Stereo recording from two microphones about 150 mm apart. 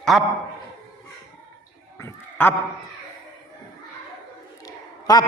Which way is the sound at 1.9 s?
15° left (ahead or behind).